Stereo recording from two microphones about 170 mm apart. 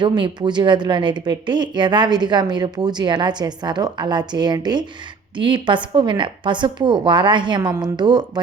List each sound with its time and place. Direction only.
0.0 s speech: 25° right (ahead or behind)